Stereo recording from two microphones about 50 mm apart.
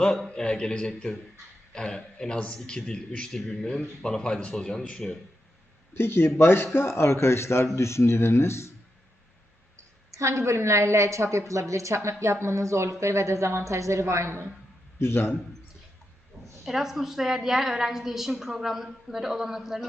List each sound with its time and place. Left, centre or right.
0.3 s a man's voice: centre
5.9 s speech: left
10.1 s speech: right
14.9 s a man's voice: left
16.6 s a woman's voice: centre